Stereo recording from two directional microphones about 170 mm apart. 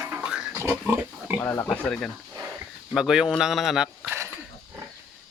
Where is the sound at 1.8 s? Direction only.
5° left (ahead or behind).